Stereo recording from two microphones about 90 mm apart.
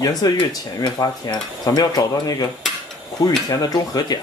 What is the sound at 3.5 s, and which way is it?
Speech, 45° left (ahead or behind).